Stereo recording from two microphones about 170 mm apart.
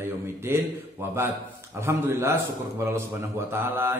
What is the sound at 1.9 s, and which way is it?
Speech, 15° right (ahead or behind).